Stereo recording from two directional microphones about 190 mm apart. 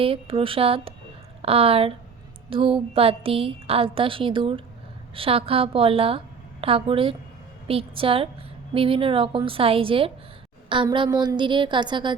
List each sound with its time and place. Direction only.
0.0 s a woman's voice: 30° right (ahead or behind)